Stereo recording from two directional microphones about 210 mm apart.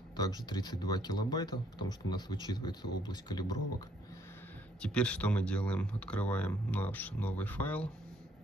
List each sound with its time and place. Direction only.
0.2 s speech: 20° left (ahead or behind)
4.8 s speech: 5° left (ahead or behind)